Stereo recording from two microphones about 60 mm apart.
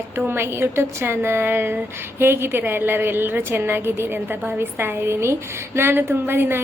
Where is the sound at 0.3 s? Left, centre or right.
Right.